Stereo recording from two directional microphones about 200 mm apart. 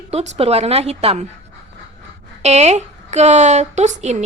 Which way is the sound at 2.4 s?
35° right (ahead or behind).